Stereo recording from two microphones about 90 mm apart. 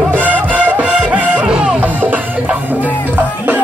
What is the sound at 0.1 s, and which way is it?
Music, 15° right (ahead or behind).